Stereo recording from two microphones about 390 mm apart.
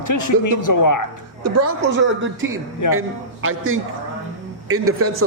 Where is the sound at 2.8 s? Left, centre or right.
Left.